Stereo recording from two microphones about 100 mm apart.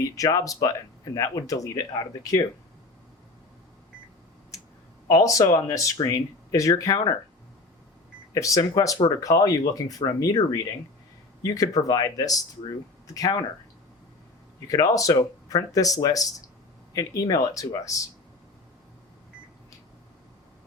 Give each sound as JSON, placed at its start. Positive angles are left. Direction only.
{"t": 0.0, "sound": "speech", "side_deg": 35}
{"t": 5.0, "sound": "speech", "side_deg": 35}
{"t": 8.3, "sound": "speech", "side_deg": 35}
{"t": 14.7, "sound": "speech", "side_deg": 35}